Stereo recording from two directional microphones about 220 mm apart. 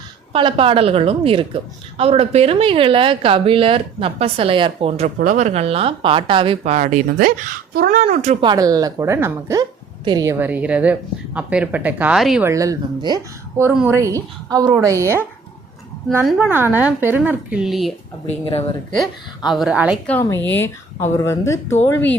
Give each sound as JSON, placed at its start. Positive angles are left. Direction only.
{"t": 0.3, "sound": "a woman's voice", "side_deg": -25}
{"t": 8.4, "sound": "a woman's voice", "side_deg": -15}
{"t": 19.5, "sound": "speech", "side_deg": -5}
{"t": 20.1, "sound": "speech", "side_deg": 10}